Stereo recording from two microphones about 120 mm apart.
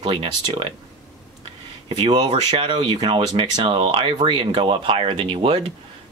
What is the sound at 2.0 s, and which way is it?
Speech, 35° right (ahead or behind).